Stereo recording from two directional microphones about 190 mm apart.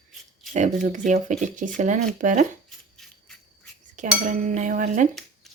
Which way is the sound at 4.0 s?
40° right (ahead or behind).